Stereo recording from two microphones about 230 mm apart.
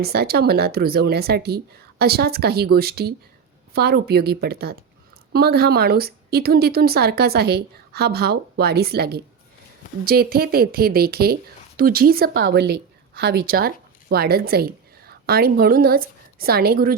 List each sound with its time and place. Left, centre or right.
0.0 s a woman's voice: right